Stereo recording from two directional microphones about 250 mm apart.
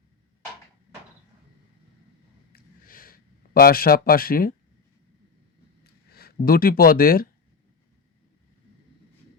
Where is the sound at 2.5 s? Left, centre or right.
Left.